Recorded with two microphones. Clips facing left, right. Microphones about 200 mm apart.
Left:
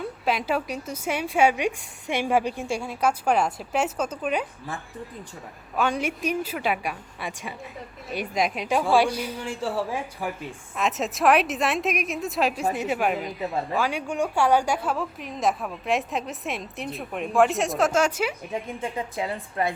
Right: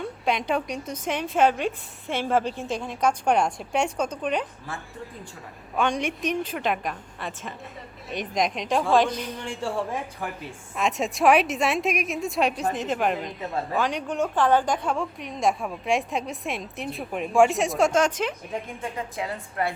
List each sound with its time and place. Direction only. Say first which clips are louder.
0.0 s a woman's voice: even; 5° left (ahead or behind)
5.7 s a woman's voice: even; 5° left (ahead or behind)
18.8 s a woman's voice: left 2 dB; 25° left (ahead or behind)